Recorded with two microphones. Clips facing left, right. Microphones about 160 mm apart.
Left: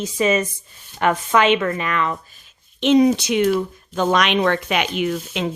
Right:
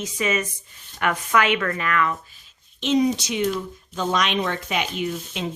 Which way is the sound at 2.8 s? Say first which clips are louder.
Left 6 dB; 65° left (ahead or behind).